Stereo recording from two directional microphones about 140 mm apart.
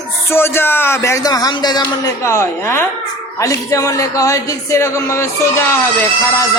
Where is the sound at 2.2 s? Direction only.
20° left (ahead or behind).